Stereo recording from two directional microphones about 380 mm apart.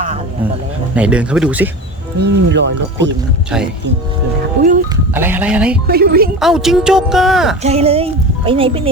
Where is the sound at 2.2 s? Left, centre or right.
Right.